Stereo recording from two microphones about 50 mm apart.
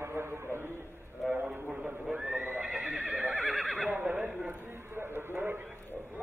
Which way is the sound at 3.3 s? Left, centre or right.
Centre.